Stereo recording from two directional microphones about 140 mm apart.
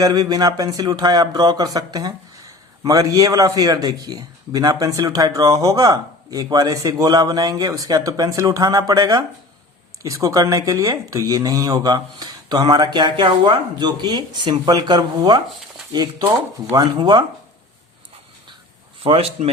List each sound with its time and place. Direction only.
0.0 s a man's voice: 30° right (ahead or behind)
19.0 s speech: 45° right (ahead or behind)